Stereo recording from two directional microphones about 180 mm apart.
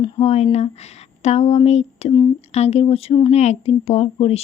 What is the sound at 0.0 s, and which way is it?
Speech, 35° left (ahead or behind).